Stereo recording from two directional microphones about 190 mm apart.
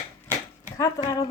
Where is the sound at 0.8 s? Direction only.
20° left (ahead or behind).